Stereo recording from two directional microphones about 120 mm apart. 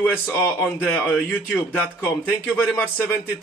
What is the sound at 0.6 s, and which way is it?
Speech, 15° left (ahead or behind).